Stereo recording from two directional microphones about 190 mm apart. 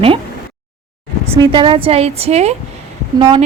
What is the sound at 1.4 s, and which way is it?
Speech, 25° right (ahead or behind).